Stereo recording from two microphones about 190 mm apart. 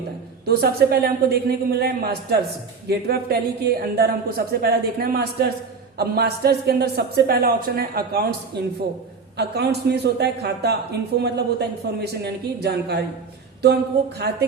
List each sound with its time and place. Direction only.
0.4 s a woman's voice: 55° right (ahead or behind)
14.2 s a woman's voice: 60° right (ahead or behind)